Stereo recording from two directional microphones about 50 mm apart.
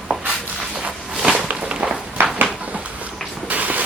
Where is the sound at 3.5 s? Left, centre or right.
Right.